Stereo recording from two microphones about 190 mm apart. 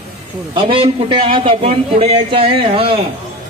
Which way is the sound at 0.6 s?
25° right (ahead or behind).